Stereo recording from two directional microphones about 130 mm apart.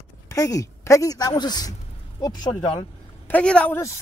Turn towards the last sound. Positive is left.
turn(degrees=10)  # may be behind; listen again after turning